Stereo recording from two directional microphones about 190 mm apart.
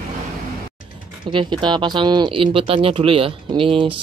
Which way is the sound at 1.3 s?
25° right (ahead or behind).